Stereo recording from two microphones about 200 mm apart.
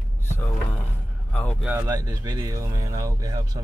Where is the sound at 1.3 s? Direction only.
5° left (ahead or behind).